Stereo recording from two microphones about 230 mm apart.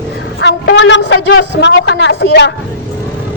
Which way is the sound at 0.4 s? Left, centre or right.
Left.